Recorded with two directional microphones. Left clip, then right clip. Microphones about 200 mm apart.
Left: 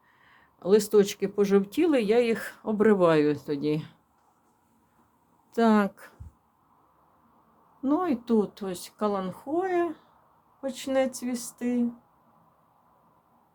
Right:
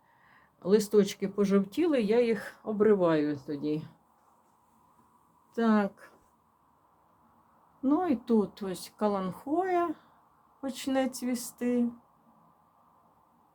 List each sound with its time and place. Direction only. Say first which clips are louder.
0.3 s speech: left 4 dB; 20° left (ahead or behind); by 3.9 s 35° left (ahead or behind)
5.5 s speech: left 5 dB; 25° left (ahead or behind)
7.8 s speech: left 1 dB; 15° left (ahead or behind)